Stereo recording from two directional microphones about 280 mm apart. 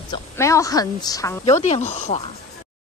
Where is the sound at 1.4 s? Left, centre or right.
Left.